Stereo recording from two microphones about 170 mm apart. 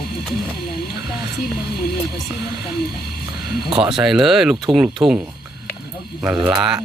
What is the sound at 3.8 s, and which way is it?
Speech, 5° right (ahead or behind).